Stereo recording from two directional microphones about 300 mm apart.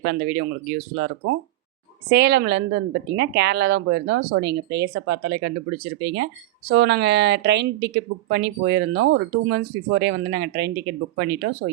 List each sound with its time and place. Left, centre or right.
0.0 s speech: right